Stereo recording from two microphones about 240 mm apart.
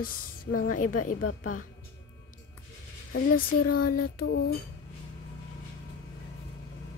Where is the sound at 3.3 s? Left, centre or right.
Left.